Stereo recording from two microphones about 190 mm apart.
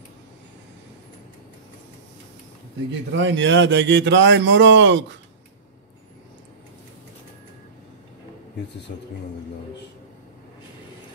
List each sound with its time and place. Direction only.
3.2 s a man's voice: 70° right (ahead or behind)
8.9 s speech: 50° left (ahead or behind)